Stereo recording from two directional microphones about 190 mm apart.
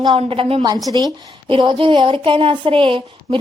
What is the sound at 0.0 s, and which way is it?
Speech, 30° right (ahead or behind).